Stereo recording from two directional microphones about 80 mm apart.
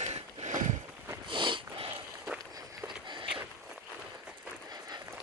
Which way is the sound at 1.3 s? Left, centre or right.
Right.